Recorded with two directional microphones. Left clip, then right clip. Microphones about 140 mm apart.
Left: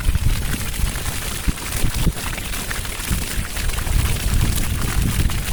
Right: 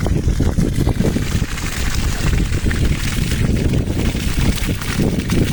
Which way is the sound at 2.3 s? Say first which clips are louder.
Right 3 dB; 60° left (ahead or behind).